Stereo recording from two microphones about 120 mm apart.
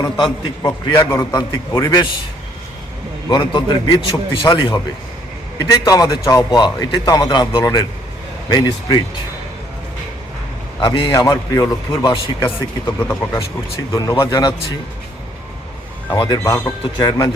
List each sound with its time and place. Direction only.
0.2 s a man's voice: 35° left (ahead or behind)
3.2 s a man's voice: 40° left (ahead or behind)
10.8 s a man's voice: 40° left (ahead or behind)
11.1 s a man's voice: 30° left (ahead or behind)
13.0 s speech: 15° left (ahead or behind)
13.7 s a man's voice: 30° left (ahead or behind)
16.0 s a man's voice: 35° left (ahead or behind)
16.4 s a man's voice: 25° left (ahead or behind)
17.0 s a man's voice: 40° left (ahead or behind)